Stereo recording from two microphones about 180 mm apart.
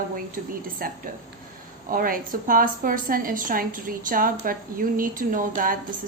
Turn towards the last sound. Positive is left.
turn(degrees=-50)  # may be behind; listen again after turning